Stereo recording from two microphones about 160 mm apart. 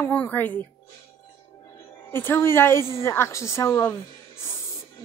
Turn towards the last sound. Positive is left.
turn(degrees=15)  # may be behind; listen again after turning